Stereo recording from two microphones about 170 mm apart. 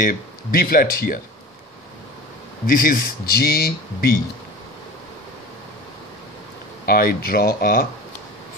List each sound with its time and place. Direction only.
0.0 s speech: 60° left (ahead or behind)
2.6 s speech: 55° left (ahead or behind)
6.9 s speech: 60° left (ahead or behind)